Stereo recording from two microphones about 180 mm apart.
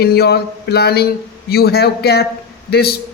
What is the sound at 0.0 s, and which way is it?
Speech, 60° left (ahead or behind).